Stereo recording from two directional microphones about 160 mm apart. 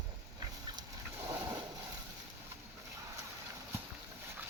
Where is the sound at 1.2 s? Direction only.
15° right (ahead or behind).